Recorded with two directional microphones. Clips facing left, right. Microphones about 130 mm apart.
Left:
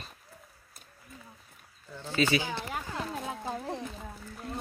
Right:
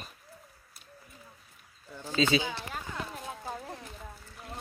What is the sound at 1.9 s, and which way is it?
Speech, 15° right (ahead or behind).